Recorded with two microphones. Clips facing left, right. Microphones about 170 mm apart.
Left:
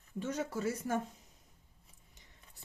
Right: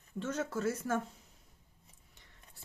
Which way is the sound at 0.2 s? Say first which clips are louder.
Right 1 dB; 15° left (ahead or behind).